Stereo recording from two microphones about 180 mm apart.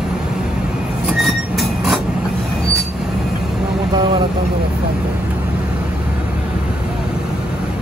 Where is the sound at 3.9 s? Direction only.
25° right (ahead or behind).